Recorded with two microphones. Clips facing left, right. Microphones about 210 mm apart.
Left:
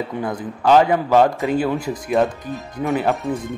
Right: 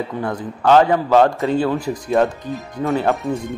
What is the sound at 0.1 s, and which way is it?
Speech, 15° left (ahead or behind).